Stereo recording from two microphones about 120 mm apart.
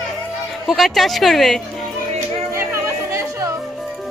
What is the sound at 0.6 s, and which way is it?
Speech, centre (ahead or behind).